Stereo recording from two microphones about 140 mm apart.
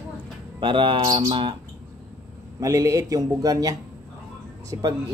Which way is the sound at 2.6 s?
25° right (ahead or behind).